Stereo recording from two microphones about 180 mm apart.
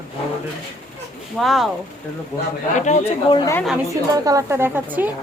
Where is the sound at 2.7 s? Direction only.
40° left (ahead or behind).